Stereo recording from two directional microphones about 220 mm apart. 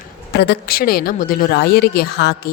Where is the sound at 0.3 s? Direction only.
50° left (ahead or behind).